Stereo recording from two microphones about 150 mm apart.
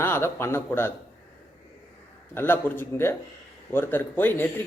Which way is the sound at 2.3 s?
15° left (ahead or behind).